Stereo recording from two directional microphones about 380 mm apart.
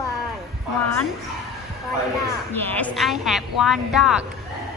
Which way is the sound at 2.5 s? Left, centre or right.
Centre.